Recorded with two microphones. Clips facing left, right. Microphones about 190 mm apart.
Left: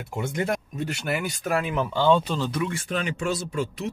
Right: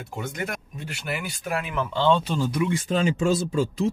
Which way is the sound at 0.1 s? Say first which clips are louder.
Left 5 dB; 25° left (ahead or behind).